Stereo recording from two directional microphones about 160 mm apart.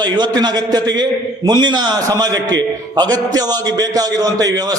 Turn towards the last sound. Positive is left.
turn(degrees=-25)  # may be behind; listen again after turning